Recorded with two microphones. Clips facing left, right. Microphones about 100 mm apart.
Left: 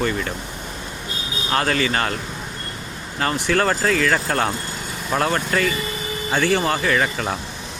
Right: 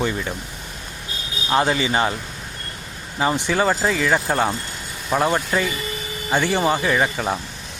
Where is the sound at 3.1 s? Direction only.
10° right (ahead or behind).